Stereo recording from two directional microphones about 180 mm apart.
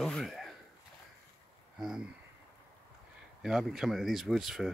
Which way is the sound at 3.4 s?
Centre (ahead or behind).